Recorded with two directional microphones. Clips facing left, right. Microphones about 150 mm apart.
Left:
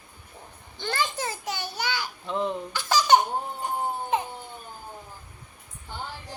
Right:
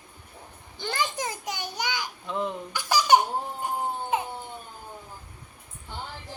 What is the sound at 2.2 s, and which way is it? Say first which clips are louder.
Baby laughter: left 3 dB; 5° right (ahead or behind).